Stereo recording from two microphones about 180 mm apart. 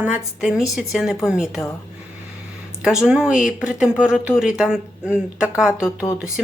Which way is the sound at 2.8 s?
5° right (ahead or behind).